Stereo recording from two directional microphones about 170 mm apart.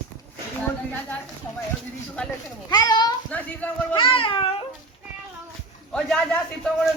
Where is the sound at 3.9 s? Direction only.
30° left (ahead or behind).